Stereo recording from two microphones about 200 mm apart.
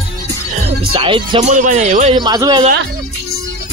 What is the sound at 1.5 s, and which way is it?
Speech, 40° right (ahead or behind).